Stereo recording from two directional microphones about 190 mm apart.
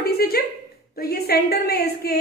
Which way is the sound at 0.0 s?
55° left (ahead or behind).